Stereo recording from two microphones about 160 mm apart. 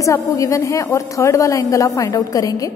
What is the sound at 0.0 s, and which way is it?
A woman's voice, 20° left (ahead or behind).